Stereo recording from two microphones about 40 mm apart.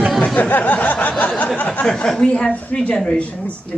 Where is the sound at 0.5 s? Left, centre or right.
Left.